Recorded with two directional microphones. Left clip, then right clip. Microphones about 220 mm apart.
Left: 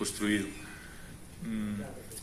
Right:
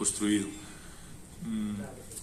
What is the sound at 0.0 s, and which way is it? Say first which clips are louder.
A man's voice: right 2 dB; 50° right (ahead or behind).